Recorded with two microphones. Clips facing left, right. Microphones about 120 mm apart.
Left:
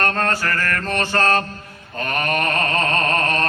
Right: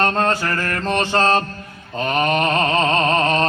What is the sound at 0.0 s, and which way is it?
Mantra, 20° right (ahead or behind).